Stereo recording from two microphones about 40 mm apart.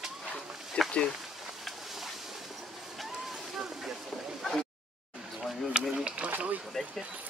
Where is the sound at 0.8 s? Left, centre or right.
Centre.